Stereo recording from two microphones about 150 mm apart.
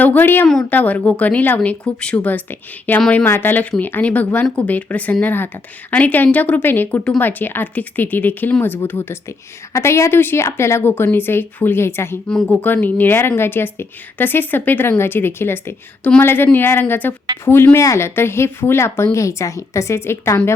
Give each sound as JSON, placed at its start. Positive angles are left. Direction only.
{"t": 0.0, "sound": "a woman's voice", "side_deg": 10}